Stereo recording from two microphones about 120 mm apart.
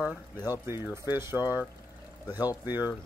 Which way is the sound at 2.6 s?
35° left (ahead or behind).